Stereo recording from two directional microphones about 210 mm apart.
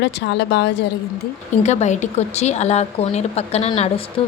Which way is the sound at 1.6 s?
35° left (ahead or behind).